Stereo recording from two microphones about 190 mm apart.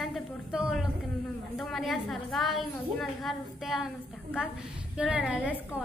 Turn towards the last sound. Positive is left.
turn(degrees=-5)  # may be behind; listen again after turning